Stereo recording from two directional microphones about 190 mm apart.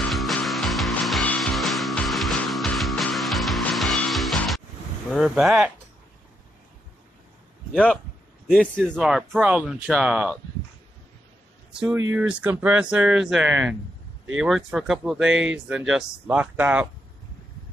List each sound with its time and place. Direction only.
0.1 s music: centre (ahead or behind)
5.1 s speech: centre (ahead or behind)
7.7 s speech: 5° left (ahead or behind)
12.2 s speech: 10° right (ahead or behind)